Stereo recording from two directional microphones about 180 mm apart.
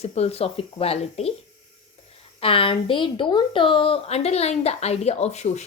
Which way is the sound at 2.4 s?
30° left (ahead or behind).